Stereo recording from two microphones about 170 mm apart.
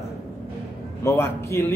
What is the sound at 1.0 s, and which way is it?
Speech, 15° left (ahead or behind).